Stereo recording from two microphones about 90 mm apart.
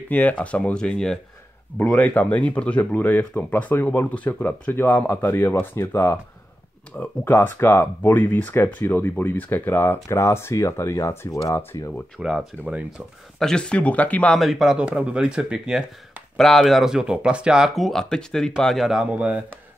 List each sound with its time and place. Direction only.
0.1 s speech: 15° left (ahead or behind)
1.8 s speech: 25° left (ahead or behind)
12.2 s speech: 10° right (ahead or behind)
13.4 s speech: 10° left (ahead or behind)
14.4 s speech: 5° right (ahead or behind)
16.3 s speech: 5° left (ahead or behind)
17.7 s speech: 5° left (ahead or behind)
19.0 s speech: 15° right (ahead or behind)